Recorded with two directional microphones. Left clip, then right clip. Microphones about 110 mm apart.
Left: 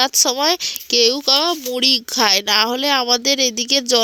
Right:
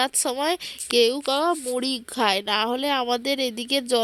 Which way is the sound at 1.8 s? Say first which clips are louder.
Left 9 dB; 35° left (ahead or behind).